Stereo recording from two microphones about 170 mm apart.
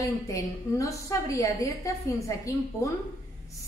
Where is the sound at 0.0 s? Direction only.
20° left (ahead or behind).